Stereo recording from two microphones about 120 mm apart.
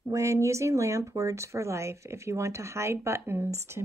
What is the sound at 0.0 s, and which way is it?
Speech, 25° right (ahead or behind).